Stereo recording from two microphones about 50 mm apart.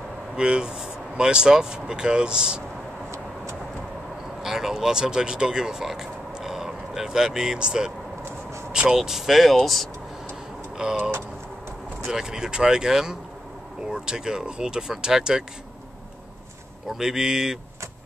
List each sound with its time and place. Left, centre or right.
0.4 s speech: centre
4.4 s speech: centre
8.9 s speech: centre
10.8 s speech: centre
12.1 s speech: centre
16.9 s speech: centre